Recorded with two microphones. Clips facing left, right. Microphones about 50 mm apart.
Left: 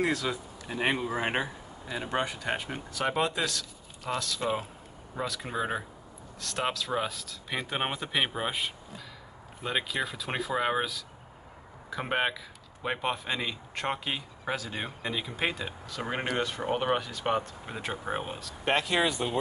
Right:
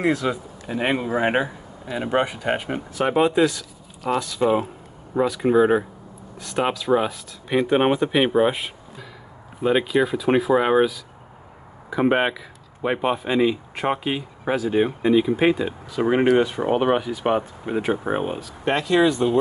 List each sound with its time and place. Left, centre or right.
0.0 s speech: right
11.9 s speech: centre
18.4 s speech: centre